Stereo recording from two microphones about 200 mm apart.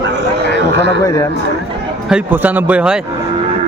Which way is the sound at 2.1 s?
10° right (ahead or behind).